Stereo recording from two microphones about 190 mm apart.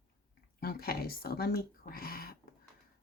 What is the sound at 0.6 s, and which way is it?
Speech, 50° left (ahead or behind).